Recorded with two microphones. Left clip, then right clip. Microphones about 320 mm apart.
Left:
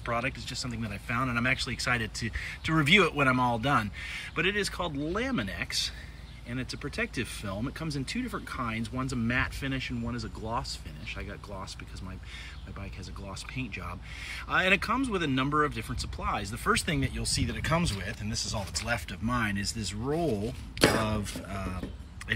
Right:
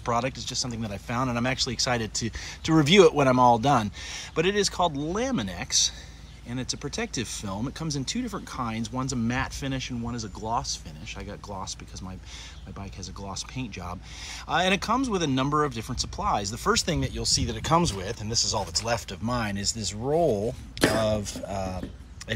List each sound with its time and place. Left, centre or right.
0.0 s speech: centre
13.3 s speech: centre
20.8 s speech: centre